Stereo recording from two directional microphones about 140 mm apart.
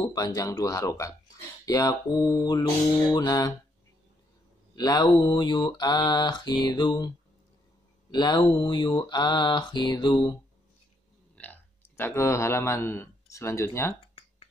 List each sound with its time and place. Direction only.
0.1 s mantra: 25° left (ahead or behind)
4.7 s mantra: 25° left (ahead or behind)
8.1 s mantra: 30° left (ahead or behind)
11.3 s speech: 10° left (ahead or behind)